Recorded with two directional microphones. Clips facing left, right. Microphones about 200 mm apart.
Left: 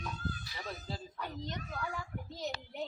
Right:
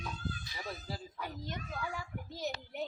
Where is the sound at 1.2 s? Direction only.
5° right (ahead or behind).